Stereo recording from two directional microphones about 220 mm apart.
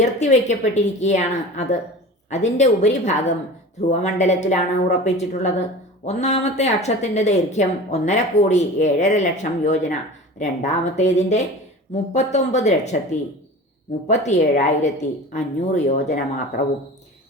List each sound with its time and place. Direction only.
0.0 s a woman's voice: 30° left (ahead or behind)
14.1 s a woman's voice: 30° left (ahead or behind)